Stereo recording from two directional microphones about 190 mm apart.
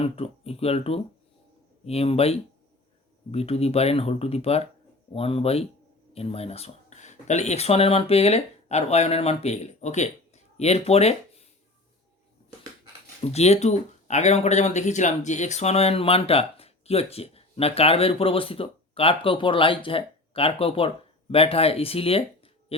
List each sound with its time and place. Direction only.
0.0 s speech: 30° left (ahead or behind)
13.2 s speech: 35° left (ahead or behind)